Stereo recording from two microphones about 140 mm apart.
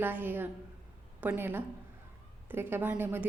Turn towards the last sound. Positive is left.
turn(degrees=-15)  # may be behind; listen again after turning